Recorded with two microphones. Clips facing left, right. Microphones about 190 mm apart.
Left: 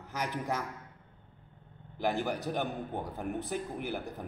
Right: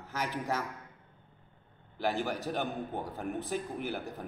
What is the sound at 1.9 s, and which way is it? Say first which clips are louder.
A man's voice: left 1 dB; 15° left (ahead or behind).